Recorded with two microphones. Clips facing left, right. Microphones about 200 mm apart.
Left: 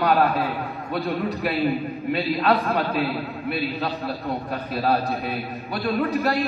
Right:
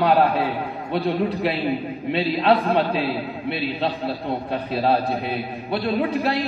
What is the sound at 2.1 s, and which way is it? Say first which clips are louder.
A man's voice: right 2 dB; 25° right (ahead or behind).